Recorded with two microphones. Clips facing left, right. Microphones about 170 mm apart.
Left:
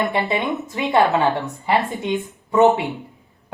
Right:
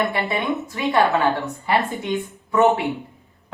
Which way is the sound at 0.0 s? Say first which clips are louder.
Left 2 dB; 20° left (ahead or behind).